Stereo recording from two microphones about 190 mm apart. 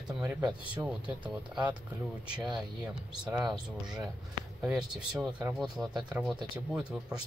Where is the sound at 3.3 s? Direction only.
5° right (ahead or behind).